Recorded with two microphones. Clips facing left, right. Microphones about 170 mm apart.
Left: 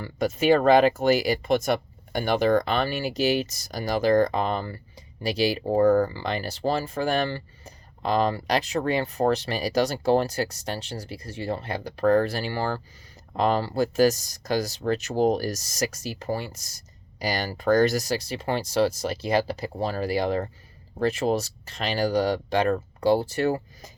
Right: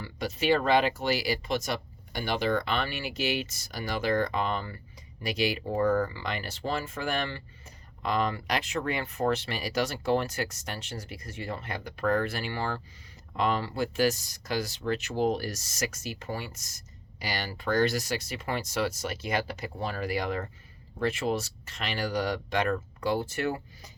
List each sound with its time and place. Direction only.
0.0 s speech: 50° left (ahead or behind)